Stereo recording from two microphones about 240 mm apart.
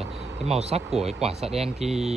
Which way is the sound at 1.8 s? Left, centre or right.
Centre.